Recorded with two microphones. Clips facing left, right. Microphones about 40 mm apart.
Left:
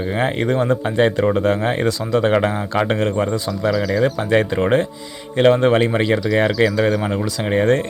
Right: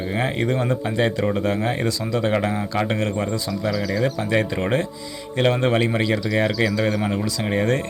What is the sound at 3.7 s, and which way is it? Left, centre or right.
Speech, centre.